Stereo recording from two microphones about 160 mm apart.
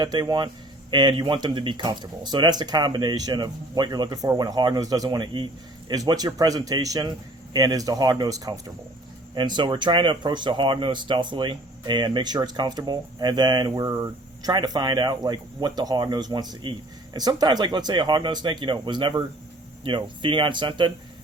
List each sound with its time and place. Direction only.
0.0 s speech: 25° right (ahead or behind)